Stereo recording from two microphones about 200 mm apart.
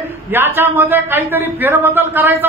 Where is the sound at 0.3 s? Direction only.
10° right (ahead or behind).